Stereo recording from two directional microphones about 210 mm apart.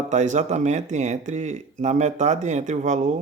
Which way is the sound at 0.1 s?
35° right (ahead or behind).